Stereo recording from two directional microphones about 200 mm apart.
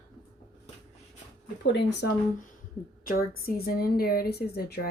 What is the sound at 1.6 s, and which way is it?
Speech, 60° left (ahead or behind).